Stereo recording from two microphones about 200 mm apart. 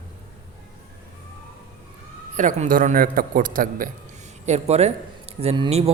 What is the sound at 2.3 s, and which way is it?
A man's voice, 40° right (ahead or behind).